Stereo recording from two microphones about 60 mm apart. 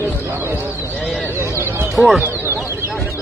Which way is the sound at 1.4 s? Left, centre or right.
Right.